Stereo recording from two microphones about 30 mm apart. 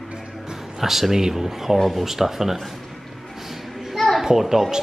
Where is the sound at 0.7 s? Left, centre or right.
Centre.